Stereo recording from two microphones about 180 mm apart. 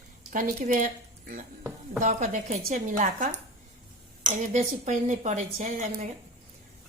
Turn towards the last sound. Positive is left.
turn(degrees=-45)  # may be behind; listen again after turning